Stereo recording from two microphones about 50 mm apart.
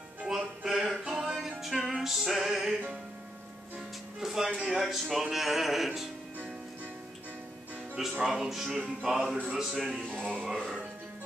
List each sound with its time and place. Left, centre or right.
0.3 s music: centre
4.2 s music: centre
4.5 s music: centre
4.7 s speech: centre
5.3 s a sound: centre
8.0 s speech: centre
9.5 s a sound: centre
10.4 s speech: centre